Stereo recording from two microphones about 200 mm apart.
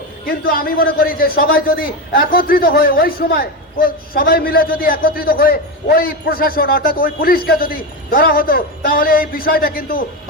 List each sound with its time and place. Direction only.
0.3 s a man's voice: 45° left (ahead or behind)